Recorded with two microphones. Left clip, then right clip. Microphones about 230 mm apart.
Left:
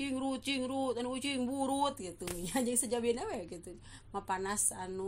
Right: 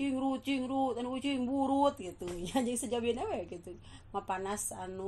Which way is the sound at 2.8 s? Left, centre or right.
Left.